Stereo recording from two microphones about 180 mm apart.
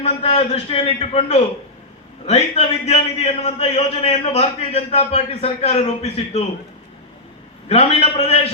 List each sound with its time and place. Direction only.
0.0 s a man's voice: 35° left (ahead or behind)
7.7 s a man's voice: 35° left (ahead or behind)